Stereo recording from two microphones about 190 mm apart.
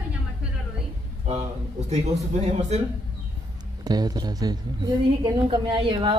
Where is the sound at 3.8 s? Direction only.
20° right (ahead or behind).